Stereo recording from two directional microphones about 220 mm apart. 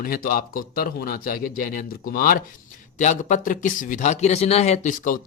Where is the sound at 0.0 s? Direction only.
40° left (ahead or behind).